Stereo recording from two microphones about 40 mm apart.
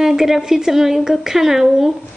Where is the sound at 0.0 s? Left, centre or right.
Centre.